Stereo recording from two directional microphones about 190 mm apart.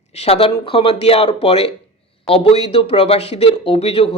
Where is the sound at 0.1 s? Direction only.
35° left (ahead or behind).